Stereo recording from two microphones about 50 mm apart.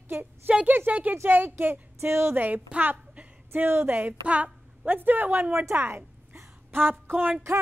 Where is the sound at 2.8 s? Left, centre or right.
Right.